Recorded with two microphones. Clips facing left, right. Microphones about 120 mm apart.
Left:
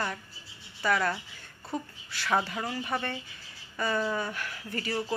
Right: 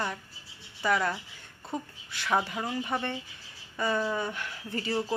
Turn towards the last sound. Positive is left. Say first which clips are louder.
# right 2 dB
turn(degrees=-20)  # may be behind; listen again after turning